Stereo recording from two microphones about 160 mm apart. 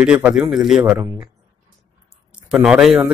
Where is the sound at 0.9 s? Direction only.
20° right (ahead or behind).